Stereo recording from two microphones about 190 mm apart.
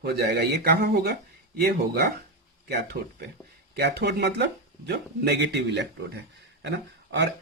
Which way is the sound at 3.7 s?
60° right (ahead or behind).